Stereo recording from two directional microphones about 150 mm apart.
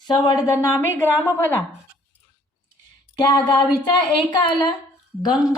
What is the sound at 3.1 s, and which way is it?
Speech, 35° left (ahead or behind).